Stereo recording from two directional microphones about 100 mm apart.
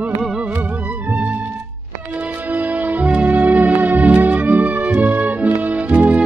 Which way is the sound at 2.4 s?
15° right (ahead or behind).